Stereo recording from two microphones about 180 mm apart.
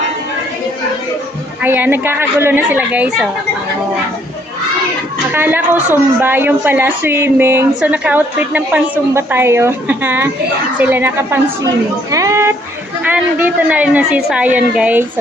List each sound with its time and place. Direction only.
1.6 s a woman's voice: 10° right (ahead or behind)
5.3 s a woman's voice: 10° right (ahead or behind)